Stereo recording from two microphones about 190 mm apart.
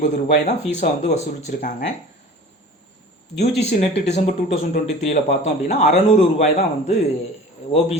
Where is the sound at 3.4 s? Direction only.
35° left (ahead or behind).